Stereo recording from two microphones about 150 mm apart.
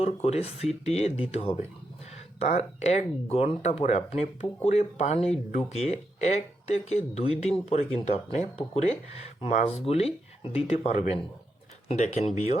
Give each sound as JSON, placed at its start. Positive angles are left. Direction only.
{"t": 0.0, "sound": "speech", "side_deg": 45}